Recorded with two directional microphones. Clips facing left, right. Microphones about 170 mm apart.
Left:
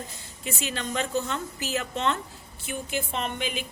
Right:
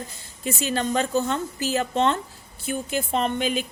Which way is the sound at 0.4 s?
40° right (ahead or behind).